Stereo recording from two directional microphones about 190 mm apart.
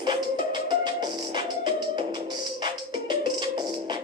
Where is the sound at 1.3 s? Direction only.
25° right (ahead or behind).